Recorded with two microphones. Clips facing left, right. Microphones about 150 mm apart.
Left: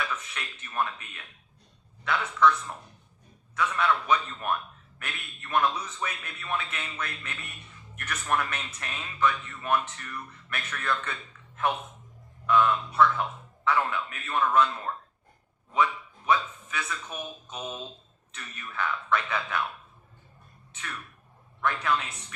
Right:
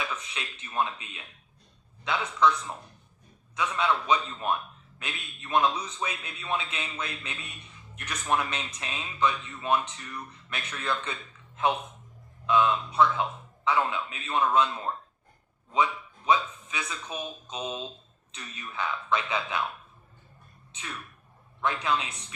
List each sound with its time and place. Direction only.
0.0 s a man's voice: 20° right (ahead or behind)
20.7 s a man's voice: 20° right (ahead or behind)